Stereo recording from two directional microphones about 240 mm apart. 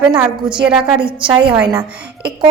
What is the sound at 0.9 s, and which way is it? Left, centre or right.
Speech, right.